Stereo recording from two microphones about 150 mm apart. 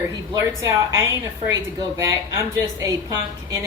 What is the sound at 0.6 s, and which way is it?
A woman's voice, 20° right (ahead or behind).